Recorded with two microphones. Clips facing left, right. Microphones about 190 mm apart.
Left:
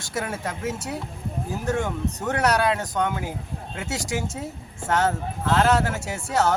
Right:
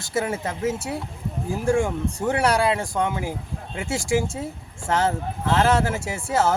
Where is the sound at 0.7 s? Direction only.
25° right (ahead or behind).